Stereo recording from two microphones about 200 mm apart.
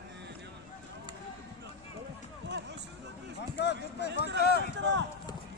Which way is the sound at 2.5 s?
60° right (ahead or behind).